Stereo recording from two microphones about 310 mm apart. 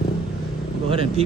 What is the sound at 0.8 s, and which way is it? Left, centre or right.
Speech, centre.